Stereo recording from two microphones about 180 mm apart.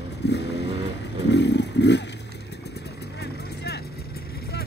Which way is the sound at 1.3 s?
70° left (ahead or behind).